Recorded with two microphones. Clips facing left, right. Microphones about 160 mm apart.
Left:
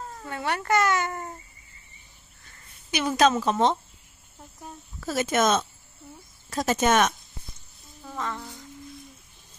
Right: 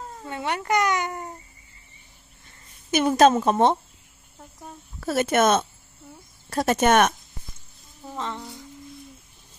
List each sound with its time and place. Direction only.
0.2 s speech: 20° right (ahead or behind)
2.9 s a woman's voice: 50° right (ahead or behind)
5.0 s speech: 60° right (ahead or behind)
8.0 s a sound: 25° right (ahead or behind)